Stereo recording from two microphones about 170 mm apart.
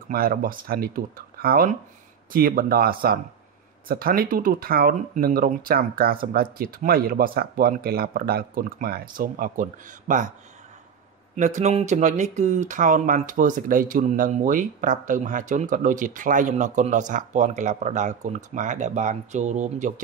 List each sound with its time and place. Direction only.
0.1 s speech: 60° right (ahead or behind)
11.3 s speech: 45° right (ahead or behind)